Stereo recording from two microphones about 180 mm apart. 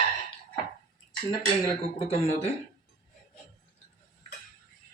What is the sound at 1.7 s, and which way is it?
Speech, 35° left (ahead or behind).